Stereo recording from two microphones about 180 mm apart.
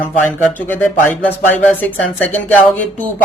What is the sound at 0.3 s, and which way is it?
Speech, 10° left (ahead or behind).